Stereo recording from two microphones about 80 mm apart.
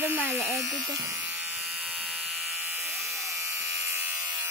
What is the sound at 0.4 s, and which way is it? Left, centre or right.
Speech, centre.